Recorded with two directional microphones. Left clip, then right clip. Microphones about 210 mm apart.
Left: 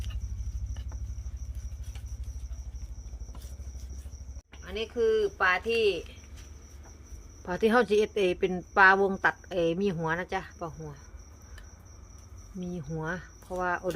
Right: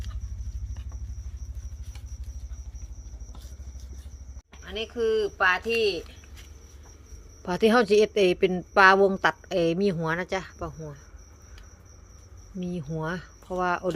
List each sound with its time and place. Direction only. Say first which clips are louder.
4.6 s a woman's voice: even; 15° right (ahead or behind)
7.4 s a woman's voice: right 3 dB; 20° right (ahead or behind)
12.5 s a woman's voice: right 4 dB; 20° right (ahead or behind)